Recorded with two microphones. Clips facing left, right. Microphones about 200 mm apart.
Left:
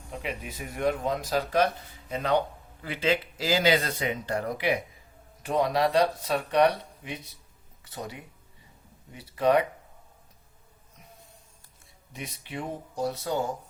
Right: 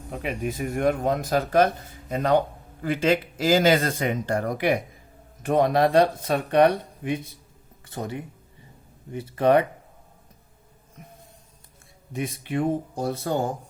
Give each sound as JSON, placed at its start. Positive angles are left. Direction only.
{"t": 0.2, "sound": "speech", "side_deg": -50}
{"t": 12.1, "sound": "speech", "side_deg": -50}